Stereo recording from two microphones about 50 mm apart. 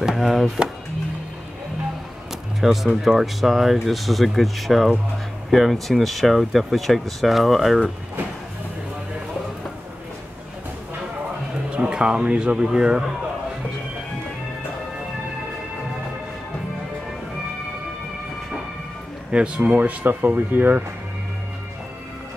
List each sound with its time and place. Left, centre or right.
0.0 s speech: centre
2.6 s speech: centre
11.7 s speech: right
19.3 s speech: right